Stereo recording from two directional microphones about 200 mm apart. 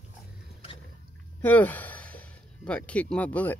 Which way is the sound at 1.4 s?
10° left (ahead or behind).